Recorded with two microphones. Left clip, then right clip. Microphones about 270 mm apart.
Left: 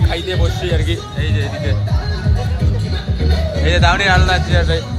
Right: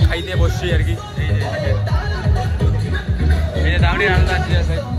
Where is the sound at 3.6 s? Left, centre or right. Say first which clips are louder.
Left 4 dB; centre.